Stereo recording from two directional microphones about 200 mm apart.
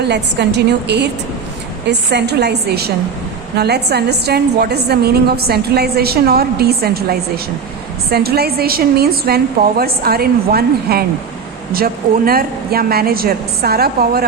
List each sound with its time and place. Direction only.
0.1 s a woman's voice: 55° right (ahead or behind)